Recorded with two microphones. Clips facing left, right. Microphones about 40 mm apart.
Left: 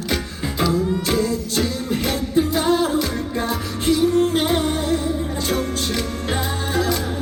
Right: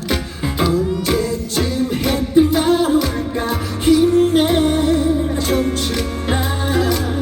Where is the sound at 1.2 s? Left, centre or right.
Centre.